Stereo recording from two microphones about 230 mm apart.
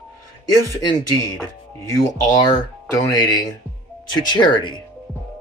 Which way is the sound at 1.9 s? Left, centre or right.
Centre.